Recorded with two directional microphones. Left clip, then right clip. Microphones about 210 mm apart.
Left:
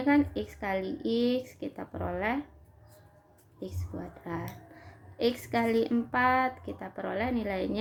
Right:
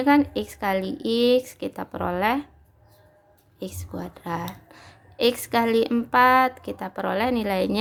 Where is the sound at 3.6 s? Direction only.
40° right (ahead or behind).